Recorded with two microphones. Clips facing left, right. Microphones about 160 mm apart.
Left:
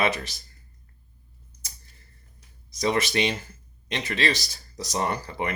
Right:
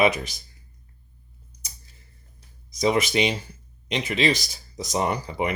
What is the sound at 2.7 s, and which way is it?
Speech, 15° right (ahead or behind).